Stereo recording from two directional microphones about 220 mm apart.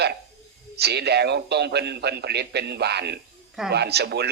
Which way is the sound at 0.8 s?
50° right (ahead or behind).